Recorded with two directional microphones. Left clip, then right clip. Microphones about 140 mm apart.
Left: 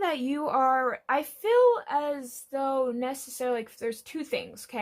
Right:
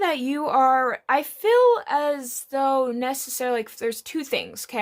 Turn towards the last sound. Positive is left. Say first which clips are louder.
# right 5 dB
turn(degrees=-50)  # may be behind; listen again after turning